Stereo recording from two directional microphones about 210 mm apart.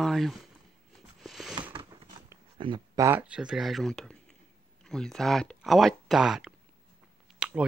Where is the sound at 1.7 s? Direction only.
25° right (ahead or behind).